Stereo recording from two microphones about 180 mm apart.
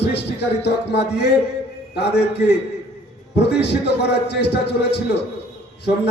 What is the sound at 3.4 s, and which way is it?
A man's voice, 65° left (ahead or behind).